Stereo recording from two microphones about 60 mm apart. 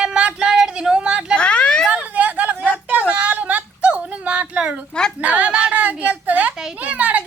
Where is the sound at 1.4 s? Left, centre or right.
Centre.